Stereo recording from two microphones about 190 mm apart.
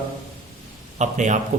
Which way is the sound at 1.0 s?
40° right (ahead or behind).